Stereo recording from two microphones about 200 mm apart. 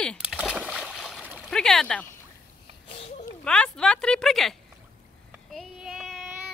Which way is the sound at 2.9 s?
30° left (ahead or behind).